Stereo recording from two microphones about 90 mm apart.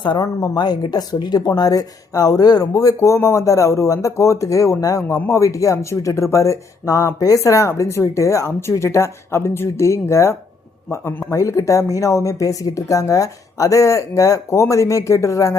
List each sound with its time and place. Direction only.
0.2 s speech: 35° left (ahead or behind)
0.5 s a man's voice: 50° left (ahead or behind); by 11.3 s 25° left (ahead or behind)
11.3 s speech: 35° left (ahead or behind)